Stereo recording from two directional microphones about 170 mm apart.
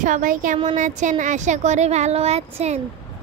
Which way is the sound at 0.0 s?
50° right (ahead or behind).